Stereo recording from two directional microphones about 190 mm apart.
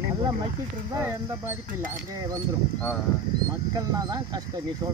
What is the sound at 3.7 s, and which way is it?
Speech, 20° right (ahead or behind).